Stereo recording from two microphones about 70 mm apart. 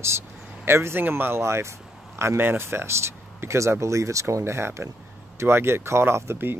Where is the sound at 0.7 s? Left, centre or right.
Right.